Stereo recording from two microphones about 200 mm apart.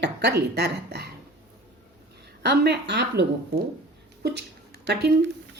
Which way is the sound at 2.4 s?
55° right (ahead or behind).